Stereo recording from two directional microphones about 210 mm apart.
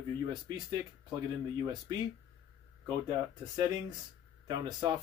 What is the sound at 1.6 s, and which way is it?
Speech, 20° right (ahead or behind).